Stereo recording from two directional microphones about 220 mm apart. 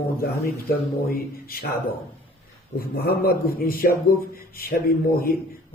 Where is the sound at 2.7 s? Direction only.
45° left (ahead or behind).